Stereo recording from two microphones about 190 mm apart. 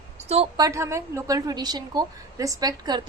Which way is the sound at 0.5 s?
20° right (ahead or behind).